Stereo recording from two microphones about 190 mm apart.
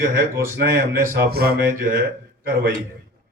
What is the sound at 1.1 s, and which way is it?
Mantra, 55° right (ahead or behind).